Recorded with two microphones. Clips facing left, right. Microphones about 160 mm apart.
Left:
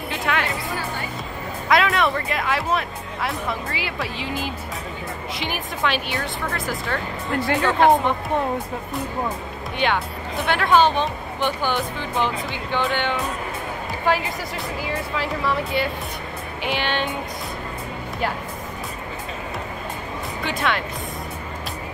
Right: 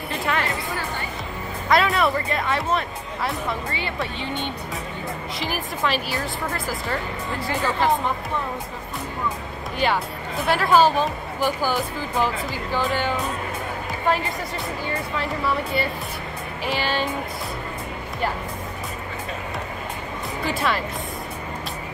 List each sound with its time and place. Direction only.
0.1 s music: centre (ahead or behind)
1.7 s speech: centre (ahead or behind)
9.8 s speech: centre (ahead or behind)
20.4 s speech: centre (ahead or behind)